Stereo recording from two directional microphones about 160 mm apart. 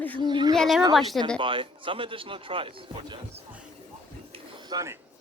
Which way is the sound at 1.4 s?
30° right (ahead or behind).